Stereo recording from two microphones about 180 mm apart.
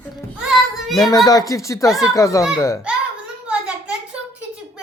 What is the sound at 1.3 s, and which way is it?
Speech, 20° left (ahead or behind).